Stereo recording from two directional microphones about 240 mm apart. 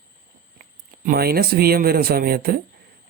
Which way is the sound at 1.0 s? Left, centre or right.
Right.